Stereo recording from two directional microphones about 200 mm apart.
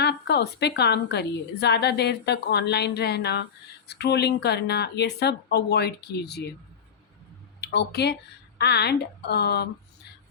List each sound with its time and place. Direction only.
0.0 s a woman's voice: 55° left (ahead or behind)
7.6 s a woman's voice: 55° left (ahead or behind)